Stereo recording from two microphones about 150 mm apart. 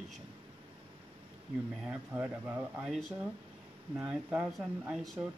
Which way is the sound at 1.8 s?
10° right (ahead or behind).